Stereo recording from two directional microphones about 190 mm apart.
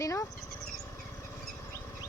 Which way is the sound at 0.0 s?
15° left (ahead or behind).